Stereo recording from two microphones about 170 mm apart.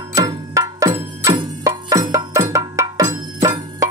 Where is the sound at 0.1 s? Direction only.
20° right (ahead or behind).